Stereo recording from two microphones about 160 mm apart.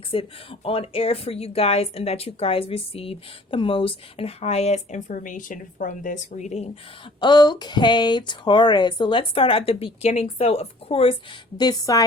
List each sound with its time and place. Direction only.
0.1 s speech: 35° left (ahead or behind)
7.2 s speech: 25° left (ahead or behind)